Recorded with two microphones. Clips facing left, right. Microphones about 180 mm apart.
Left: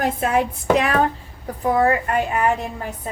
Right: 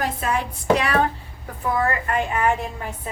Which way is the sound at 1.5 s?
35° left (ahead or behind).